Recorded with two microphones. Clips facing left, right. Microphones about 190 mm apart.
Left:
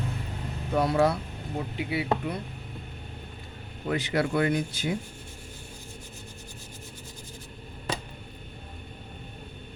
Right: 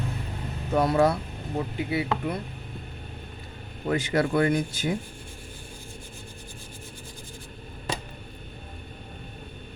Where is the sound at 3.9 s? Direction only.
45° right (ahead or behind).